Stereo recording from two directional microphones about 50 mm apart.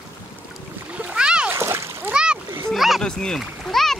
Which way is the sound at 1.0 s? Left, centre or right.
Right.